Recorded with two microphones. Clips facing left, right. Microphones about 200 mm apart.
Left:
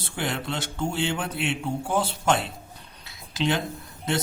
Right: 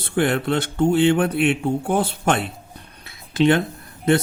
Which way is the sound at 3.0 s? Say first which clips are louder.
Right 9 dB; 55° right (ahead or behind).